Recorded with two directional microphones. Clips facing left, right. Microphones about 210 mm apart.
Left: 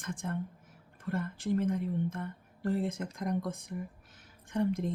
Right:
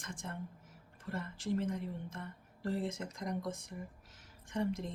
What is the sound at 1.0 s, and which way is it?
Speech, 55° left (ahead or behind).